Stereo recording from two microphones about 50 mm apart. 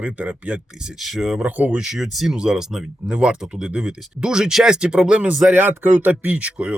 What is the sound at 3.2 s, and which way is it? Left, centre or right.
Speech, centre.